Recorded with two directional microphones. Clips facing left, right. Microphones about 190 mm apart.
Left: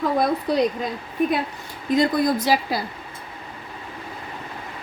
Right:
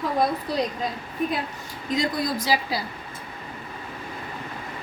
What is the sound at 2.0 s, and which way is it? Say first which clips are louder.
Speech: left 6 dB; 55° left (ahead or behind).